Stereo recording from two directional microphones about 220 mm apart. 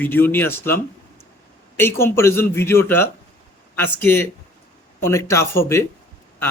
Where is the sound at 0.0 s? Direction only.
10° left (ahead or behind).